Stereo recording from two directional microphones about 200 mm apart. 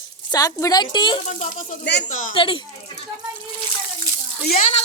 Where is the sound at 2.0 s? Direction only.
40° left (ahead or behind).